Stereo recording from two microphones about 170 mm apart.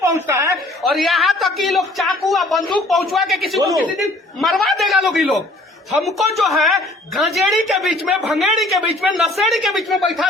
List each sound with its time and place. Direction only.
0.0 s a woman's voice: 15° right (ahead or behind)
0.8 s a woman's voice: centre (ahead or behind)